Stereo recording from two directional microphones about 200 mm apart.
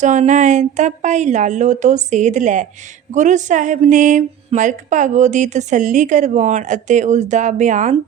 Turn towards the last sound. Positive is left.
turn(degrees=-40)  # may be behind; listen again after turning